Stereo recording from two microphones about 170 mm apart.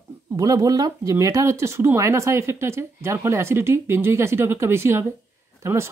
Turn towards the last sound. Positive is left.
turn(degrees=-15)  # may be behind; listen again after turning